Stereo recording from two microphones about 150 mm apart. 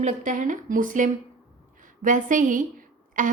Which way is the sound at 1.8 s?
60° right (ahead or behind).